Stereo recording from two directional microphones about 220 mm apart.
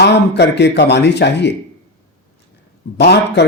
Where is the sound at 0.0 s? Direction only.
50° left (ahead or behind).